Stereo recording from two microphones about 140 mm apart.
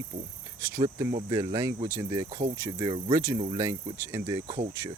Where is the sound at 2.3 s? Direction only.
45° right (ahead or behind).